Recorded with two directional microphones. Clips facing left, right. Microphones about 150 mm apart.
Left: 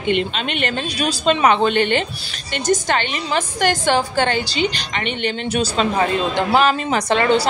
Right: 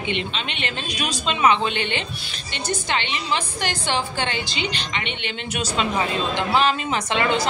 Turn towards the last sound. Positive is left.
turn(degrees=35)  # may be behind; listen again after turning